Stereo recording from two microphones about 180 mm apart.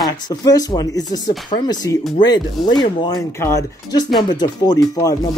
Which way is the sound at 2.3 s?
25° left (ahead or behind).